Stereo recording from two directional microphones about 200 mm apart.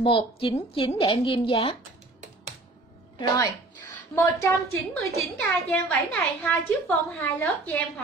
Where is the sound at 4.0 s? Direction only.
15° left (ahead or behind).